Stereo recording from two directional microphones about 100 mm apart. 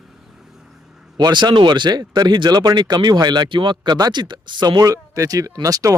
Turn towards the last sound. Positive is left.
turn(degrees=-35)  # may be behind; listen again after turning